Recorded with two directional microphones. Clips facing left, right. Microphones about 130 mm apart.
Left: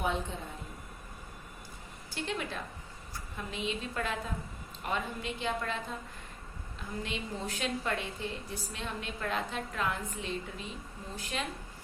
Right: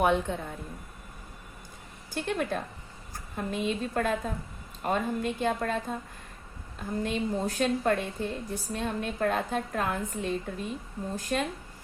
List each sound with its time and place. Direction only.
0.0 s a woman's voice: 65° right (ahead or behind)
2.1 s a woman's voice: 50° right (ahead or behind)
7.0 s a woman's voice: 45° right (ahead or behind)